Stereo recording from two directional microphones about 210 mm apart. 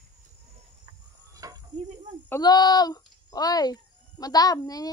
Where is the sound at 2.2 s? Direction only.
15° left (ahead or behind).